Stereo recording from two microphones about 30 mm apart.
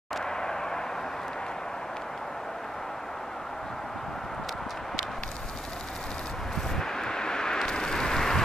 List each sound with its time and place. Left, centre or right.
0.2 s vehicle: left
6.7 s vehicle: centre